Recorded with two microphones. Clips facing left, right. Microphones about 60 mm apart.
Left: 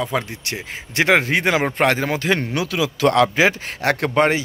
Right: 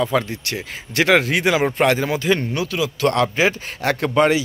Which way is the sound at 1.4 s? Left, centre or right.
Left.